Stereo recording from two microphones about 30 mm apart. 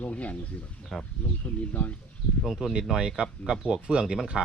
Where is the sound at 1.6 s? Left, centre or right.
Left.